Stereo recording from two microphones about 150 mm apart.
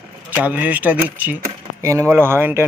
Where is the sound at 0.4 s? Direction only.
10° right (ahead or behind).